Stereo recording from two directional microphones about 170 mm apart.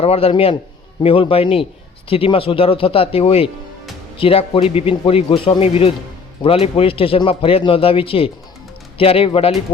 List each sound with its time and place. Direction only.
0.0 s speech: 35° left (ahead or behind)